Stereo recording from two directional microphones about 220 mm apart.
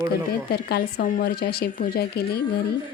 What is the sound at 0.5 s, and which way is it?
Speech, 45° left (ahead or behind).